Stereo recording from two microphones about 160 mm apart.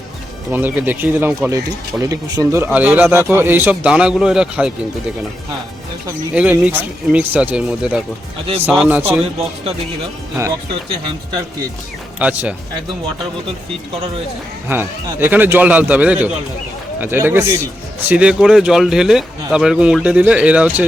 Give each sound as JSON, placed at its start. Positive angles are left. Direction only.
{"t": 0.5, "sound": "a man's voice", "side_deg": -10}
{"t": 2.6, "sound": "a man's voice", "side_deg": -10}
{"t": 6.3, "sound": "a man's voice", "side_deg": -10}
{"t": 12.2, "sound": "a man's voice", "side_deg": -10}
{"t": 14.7, "sound": "a man's voice", "side_deg": -10}